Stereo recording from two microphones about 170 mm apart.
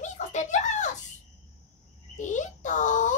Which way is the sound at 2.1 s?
45° left (ahead or behind).